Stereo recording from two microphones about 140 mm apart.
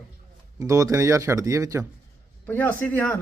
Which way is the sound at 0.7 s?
20° right (ahead or behind).